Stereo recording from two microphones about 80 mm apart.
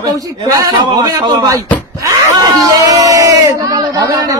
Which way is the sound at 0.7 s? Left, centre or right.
Right.